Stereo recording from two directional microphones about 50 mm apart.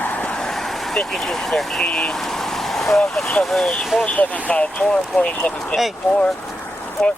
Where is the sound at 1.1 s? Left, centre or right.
Centre.